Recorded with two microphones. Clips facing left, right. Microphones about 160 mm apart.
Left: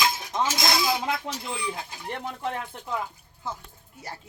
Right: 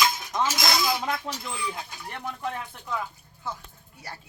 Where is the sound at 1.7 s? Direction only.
20° left (ahead or behind).